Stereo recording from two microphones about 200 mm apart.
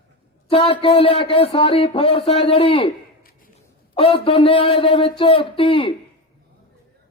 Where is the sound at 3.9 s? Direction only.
25° left (ahead or behind).